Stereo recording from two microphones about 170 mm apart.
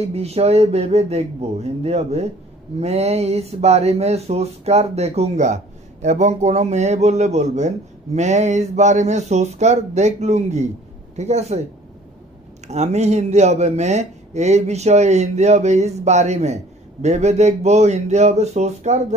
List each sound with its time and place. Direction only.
0.0 s a man's voice: 35° right (ahead or behind)
12.6 s a man's voice: 40° right (ahead or behind)